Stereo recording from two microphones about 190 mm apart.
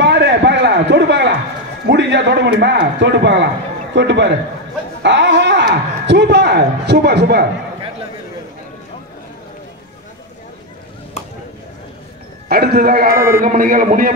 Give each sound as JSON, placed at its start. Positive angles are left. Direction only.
{"t": 0.0, "sound": "a sound", "side_deg": -65}
{"t": 1.9, "sound": "a man's voice", "side_deg": -65}
{"t": 12.4, "sound": "a man's voice", "side_deg": -55}